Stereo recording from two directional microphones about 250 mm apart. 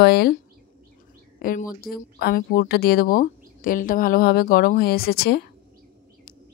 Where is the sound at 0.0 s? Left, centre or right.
Left.